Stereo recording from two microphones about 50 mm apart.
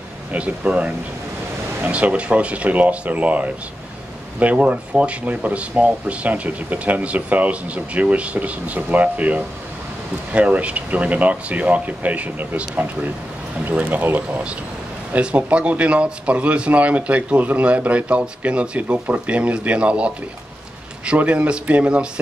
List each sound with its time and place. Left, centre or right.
0.3 s speech: right
15.1 s speech: right
21.2 s speech: right